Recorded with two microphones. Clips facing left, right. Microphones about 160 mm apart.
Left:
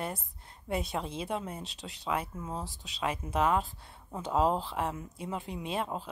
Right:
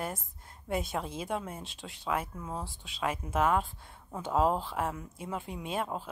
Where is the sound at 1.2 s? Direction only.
5° right (ahead or behind).